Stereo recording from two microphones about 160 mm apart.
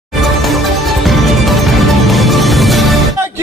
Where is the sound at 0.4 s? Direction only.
Centre (ahead or behind).